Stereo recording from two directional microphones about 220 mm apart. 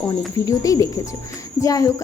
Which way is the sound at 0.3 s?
15° left (ahead or behind).